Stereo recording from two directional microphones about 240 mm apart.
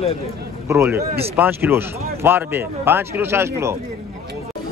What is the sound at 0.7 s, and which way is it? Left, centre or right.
Speech, centre.